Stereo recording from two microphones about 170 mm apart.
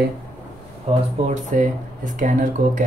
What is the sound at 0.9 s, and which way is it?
Speech, 40° right (ahead or behind).